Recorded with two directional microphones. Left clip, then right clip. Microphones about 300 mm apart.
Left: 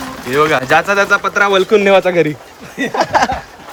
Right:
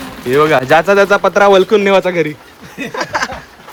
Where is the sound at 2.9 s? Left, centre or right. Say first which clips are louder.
Left 5 dB; centre.